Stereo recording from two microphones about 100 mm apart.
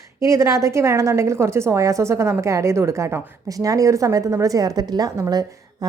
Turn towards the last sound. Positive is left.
turn(degrees=-40)  # may be behind; listen again after turning